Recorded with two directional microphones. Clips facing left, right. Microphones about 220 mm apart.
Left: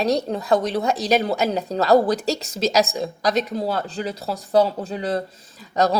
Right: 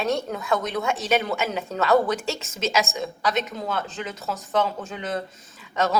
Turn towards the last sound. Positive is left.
turn(degrees=35)  # may be behind; listen again after turning